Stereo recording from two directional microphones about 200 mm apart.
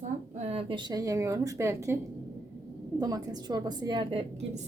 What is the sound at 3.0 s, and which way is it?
A woman's voice, 20° right (ahead or behind).